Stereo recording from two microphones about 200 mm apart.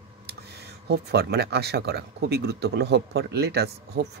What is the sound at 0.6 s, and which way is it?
Speech, 55° right (ahead or behind).